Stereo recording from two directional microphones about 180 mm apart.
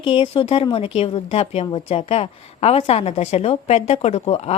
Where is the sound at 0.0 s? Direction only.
30° left (ahead or behind).